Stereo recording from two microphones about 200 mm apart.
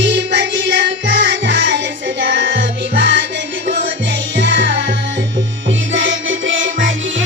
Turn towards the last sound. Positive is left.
turn(degrees=-70)  # may be behind; listen again after turning